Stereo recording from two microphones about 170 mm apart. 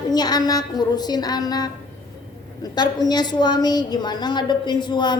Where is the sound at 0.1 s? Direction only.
25° left (ahead or behind).